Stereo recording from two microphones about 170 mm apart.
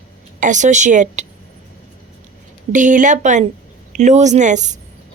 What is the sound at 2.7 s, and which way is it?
A woman's voice, 50° right (ahead or behind).